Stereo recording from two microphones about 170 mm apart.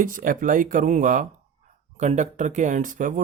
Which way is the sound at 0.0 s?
55° right (ahead or behind).